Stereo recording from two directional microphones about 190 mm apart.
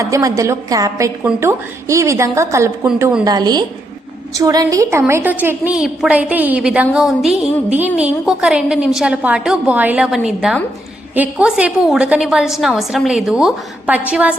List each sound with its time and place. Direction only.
0.0 s a woman's voice: 20° right (ahead or behind)
2.8 s a woman's voice: 5° right (ahead or behind)
3.2 s a woman's voice: 20° right (ahead or behind)